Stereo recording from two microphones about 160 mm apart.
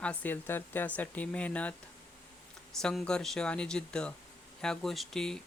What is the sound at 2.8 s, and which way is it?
Speech, 5° left (ahead or behind).